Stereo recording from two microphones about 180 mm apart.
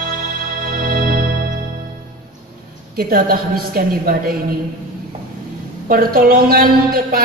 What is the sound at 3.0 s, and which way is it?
A woman's voice, 55° right (ahead or behind).